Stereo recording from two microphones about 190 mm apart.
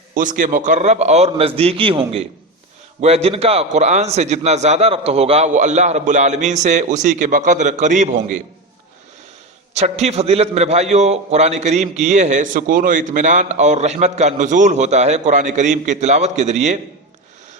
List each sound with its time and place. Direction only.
0.1 s a man's voice: 45° right (ahead or behind)
9.7 s a man's voice: 35° right (ahead or behind)